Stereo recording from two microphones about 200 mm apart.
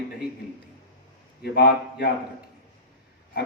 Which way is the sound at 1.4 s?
55° left (ahead or behind).